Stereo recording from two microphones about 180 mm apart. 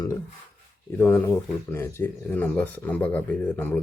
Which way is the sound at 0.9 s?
10° left (ahead or behind).